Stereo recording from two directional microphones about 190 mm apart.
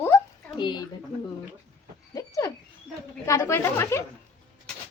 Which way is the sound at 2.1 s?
15° left (ahead or behind).